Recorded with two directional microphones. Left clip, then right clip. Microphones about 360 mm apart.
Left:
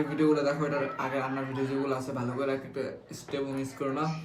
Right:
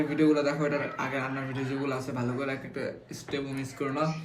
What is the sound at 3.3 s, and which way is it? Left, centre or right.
Speech, centre.